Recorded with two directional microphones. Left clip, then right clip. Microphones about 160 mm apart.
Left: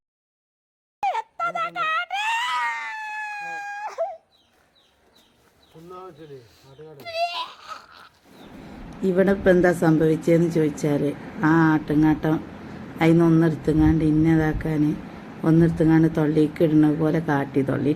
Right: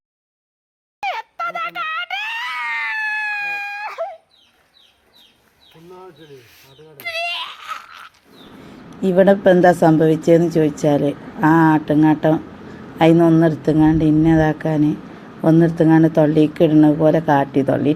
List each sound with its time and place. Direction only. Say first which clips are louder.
1.0 s a sound: right 1 dB; 15° left (ahead or behind)
6.9 s a child's voice: right 3 dB; 40° left (ahead or behind)
9.0 s speech: right 7 dB; 20° right (ahead or behind)